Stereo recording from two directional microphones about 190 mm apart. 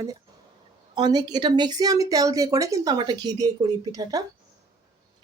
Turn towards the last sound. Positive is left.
turn(degrees=-20)  # may be behind; listen again after turning